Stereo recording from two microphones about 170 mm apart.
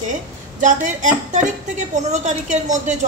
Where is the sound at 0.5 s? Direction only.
45° right (ahead or behind).